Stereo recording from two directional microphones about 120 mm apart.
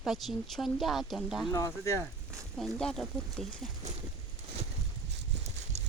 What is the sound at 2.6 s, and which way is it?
Speech, 5° left (ahead or behind).